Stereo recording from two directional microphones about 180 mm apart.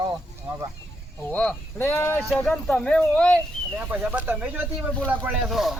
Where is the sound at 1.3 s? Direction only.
5° left (ahead or behind).